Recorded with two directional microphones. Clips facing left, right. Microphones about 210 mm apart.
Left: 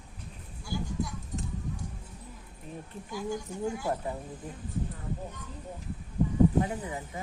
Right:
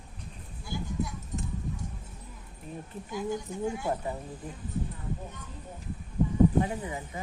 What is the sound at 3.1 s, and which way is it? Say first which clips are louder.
Speech: right 2 dB; 20° right (ahead or behind).